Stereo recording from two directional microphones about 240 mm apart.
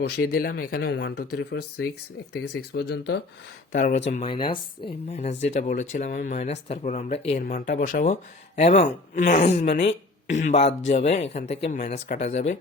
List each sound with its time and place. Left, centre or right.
0.0 s speech: left
3.7 s speech: left
4.1 s speech: left